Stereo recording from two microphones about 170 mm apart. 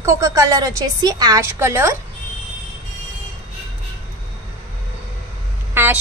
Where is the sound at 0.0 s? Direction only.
20° right (ahead or behind).